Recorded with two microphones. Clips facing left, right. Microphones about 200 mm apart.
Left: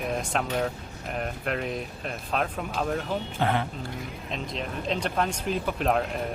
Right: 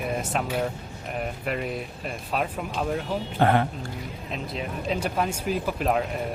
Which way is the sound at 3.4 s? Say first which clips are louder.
Right 6 dB; 50° right (ahead or behind).